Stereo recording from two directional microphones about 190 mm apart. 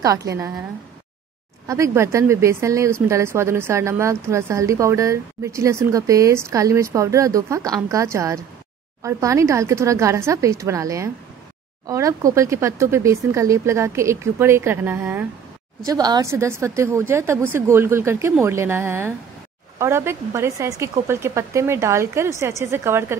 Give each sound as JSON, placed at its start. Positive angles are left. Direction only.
{"t": 0.0, "sound": "speech", "side_deg": -15}
{"t": 1.7, "sound": "speech", "side_deg": -15}